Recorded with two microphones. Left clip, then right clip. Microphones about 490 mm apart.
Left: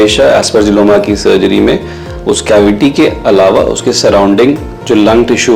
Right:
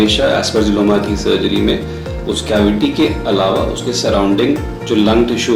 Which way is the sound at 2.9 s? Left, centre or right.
Left.